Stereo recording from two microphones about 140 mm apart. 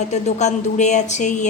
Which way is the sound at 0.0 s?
55° left (ahead or behind).